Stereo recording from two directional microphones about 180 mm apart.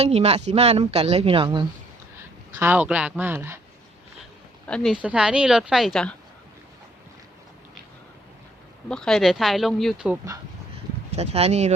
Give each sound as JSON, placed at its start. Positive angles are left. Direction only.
{"t": 0.0, "sound": "a woman's voice", "side_deg": -35}
{"t": 2.6, "sound": "speech", "side_deg": -10}
{"t": 4.2, "sound": "a woman's voice", "side_deg": 5}
{"t": 8.9, "sound": "speech", "side_deg": 5}
{"t": 11.1, "sound": "a woman's voice", "side_deg": -35}